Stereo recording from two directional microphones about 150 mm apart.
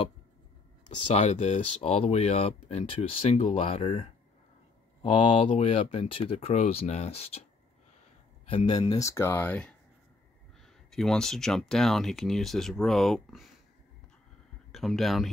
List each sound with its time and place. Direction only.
0.8 s speech: 50° left (ahead or behind)
8.5 s speech: 35° left (ahead or behind); by 9.8 s 10° left (ahead or behind)
10.9 s speech: 5° left (ahead or behind)
14.7 s speech: centre (ahead or behind)